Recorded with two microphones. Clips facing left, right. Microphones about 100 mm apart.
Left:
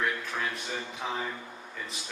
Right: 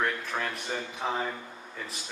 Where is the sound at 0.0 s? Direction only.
55° right (ahead or behind).